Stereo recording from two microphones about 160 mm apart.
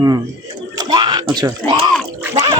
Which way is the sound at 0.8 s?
25° right (ahead or behind).